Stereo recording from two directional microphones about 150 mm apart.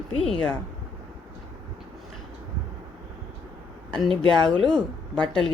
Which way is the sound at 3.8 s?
5° left (ahead or behind).